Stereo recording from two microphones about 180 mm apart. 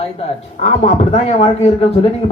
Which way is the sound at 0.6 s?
35° left (ahead or behind).